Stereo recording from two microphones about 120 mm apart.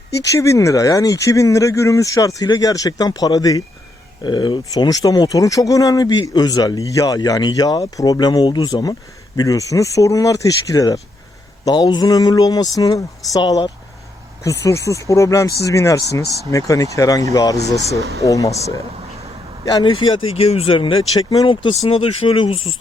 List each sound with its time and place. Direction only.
0.2 s speech: 25° left (ahead or behind)
16.2 s speech: 25° right (ahead or behind)
16.5 s speech: 30° left (ahead or behind)
19.6 s speech: 35° left (ahead or behind)
21.2 s speech: 35° left (ahead or behind)